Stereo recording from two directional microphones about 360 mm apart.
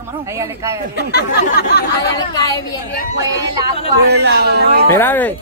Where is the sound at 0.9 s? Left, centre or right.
Left.